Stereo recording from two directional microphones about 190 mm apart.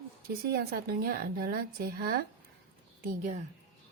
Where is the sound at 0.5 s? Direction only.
55° right (ahead or behind).